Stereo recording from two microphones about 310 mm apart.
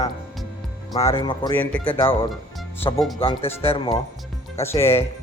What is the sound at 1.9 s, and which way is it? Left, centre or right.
A man's voice, centre.